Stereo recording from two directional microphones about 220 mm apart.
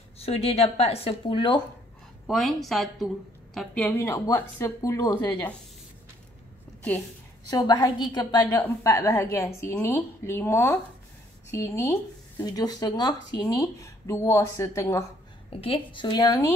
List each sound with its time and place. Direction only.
0.2 s speech: 25° left (ahead or behind)
2.2 s speech: centre (ahead or behind)
7.4 s speech: 20° left (ahead or behind)
15.5 s speech: 25° left (ahead or behind)